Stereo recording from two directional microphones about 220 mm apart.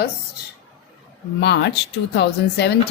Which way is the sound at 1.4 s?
50° left (ahead or behind).